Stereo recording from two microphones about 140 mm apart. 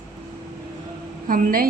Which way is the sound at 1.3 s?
90° right.